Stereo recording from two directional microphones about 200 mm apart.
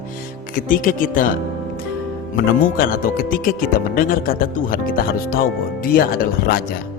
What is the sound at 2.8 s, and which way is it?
Speech, 45° left (ahead or behind).